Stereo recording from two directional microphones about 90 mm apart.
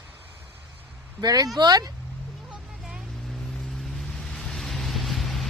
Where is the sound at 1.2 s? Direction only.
45° right (ahead or behind).